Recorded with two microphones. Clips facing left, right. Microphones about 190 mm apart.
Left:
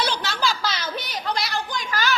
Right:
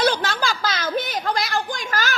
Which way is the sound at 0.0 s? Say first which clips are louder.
Right 4 dB; 50° right (ahead or behind).